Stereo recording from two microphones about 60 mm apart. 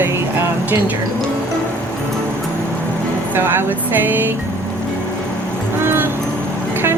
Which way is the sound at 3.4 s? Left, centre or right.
Right.